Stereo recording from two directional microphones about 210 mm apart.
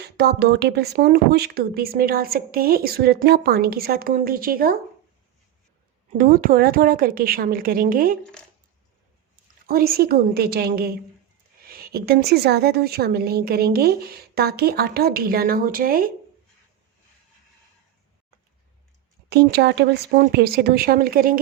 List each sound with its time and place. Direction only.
0.0 s speech: 50° right (ahead or behind)
6.1 s speech: 40° right (ahead or behind)
8.2 s speech: 5° left (ahead or behind)
9.3 s a woman's voice: 45° right (ahead or behind)
19.3 s speech: 50° right (ahead or behind)